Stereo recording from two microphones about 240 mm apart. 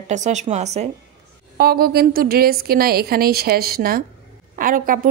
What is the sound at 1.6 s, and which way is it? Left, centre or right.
A woman's voice, right.